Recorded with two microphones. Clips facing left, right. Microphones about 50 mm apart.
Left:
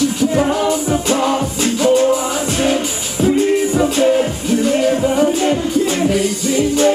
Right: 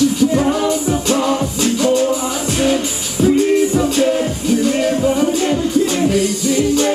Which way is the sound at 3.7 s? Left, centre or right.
Left.